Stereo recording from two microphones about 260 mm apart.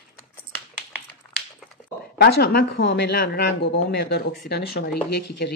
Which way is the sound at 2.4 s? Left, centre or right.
Left.